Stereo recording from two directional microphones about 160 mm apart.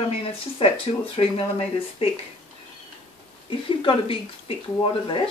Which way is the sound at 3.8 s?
35° left (ahead or behind).